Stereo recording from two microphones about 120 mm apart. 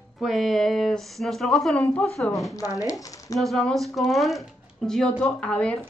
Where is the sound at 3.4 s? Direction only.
Centre (ahead or behind).